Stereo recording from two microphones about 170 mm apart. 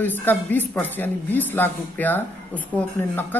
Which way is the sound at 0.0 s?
10° left (ahead or behind).